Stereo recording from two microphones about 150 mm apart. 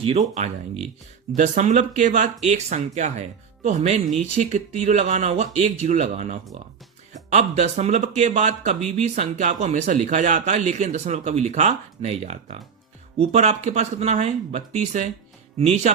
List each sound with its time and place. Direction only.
1.4 s speech: 55° right (ahead or behind)